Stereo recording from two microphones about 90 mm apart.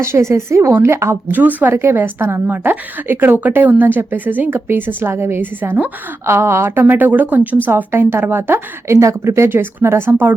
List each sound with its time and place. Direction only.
0.0 s a woman's voice: 30° right (ahead or behind)
1.3 s a woman's voice: 20° right (ahead or behind)
6.2 s a woman's voice: 30° right (ahead or behind)